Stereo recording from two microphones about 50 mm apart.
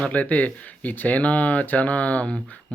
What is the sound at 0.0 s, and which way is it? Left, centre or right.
Speech, left.